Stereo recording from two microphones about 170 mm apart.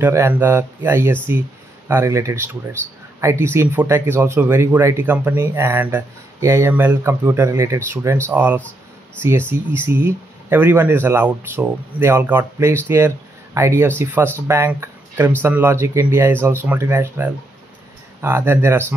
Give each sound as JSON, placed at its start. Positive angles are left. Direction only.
{"t": 0.0, "sound": "speech", "side_deg": -15}